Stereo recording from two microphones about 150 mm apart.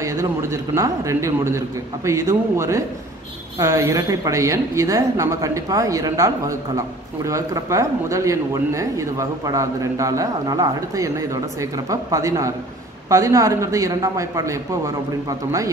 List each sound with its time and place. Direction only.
0.0 s speech: 20° right (ahead or behind)